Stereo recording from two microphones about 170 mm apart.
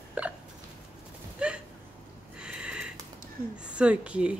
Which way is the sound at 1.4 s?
5° right (ahead or behind).